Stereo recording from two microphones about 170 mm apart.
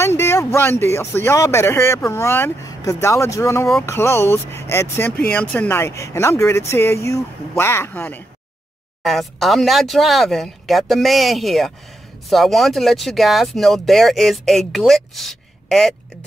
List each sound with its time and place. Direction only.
0.0 s speech: 15° left (ahead or behind)
9.0 s speech: centre (ahead or behind)